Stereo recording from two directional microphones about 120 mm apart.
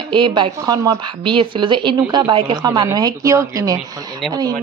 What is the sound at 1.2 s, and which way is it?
A woman's voice, 45° right (ahead or behind).